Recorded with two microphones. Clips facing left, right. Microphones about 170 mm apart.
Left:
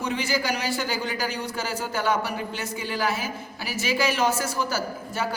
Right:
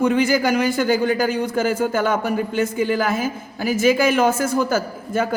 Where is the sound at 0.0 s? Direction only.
50° right (ahead or behind).